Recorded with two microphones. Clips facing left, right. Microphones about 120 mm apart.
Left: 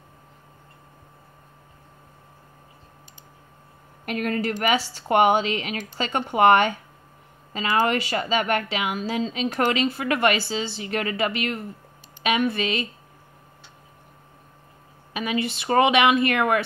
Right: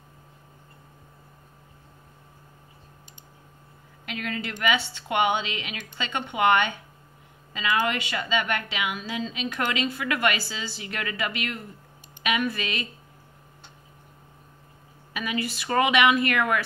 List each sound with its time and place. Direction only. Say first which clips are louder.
4.0 s a woman's voice: left 7 dB; 45° left (ahead or behind); by 12.8 s 30° left (ahead or behind)
15.1 s speech: left 4 dB; 25° left (ahead or behind)